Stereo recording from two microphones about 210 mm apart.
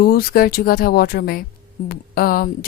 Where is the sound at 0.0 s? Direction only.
45° left (ahead or behind).